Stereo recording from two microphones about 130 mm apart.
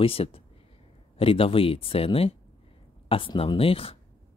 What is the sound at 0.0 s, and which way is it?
Speech, 45° left (ahead or behind).